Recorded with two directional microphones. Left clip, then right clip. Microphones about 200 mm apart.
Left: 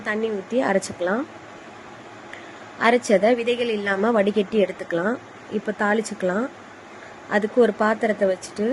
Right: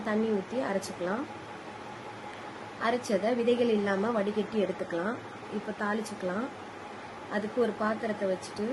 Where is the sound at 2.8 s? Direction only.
35° left (ahead or behind).